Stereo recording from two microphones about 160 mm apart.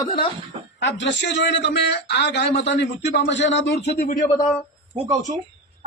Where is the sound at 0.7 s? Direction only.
90° left.